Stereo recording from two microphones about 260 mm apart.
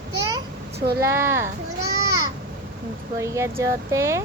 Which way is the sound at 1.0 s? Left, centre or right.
Centre.